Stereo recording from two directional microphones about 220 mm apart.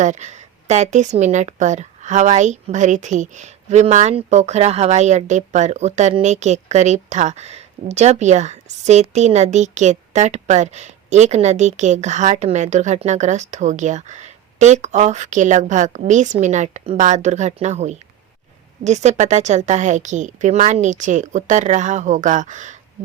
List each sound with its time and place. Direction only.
0.0 s speech: 30° right (ahead or behind)